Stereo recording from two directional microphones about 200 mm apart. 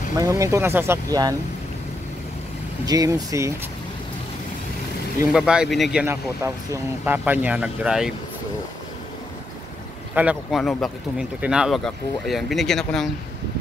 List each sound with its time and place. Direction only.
0.2 s speech: 15° right (ahead or behind)
2.8 s speech: 15° right (ahead or behind)
5.3 s speech: 5° right (ahead or behind)
5.9 s speech: 15° right (ahead or behind)
10.1 s speech: 5° right (ahead or behind)